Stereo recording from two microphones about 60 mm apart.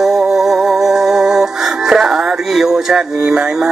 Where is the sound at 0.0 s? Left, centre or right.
Centre.